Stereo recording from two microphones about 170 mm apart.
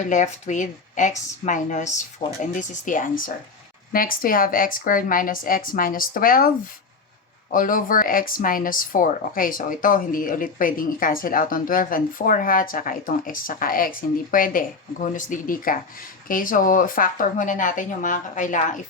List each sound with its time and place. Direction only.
0.0 s speech: 45° left (ahead or behind)
7.5 s speech: 55° left (ahead or behind)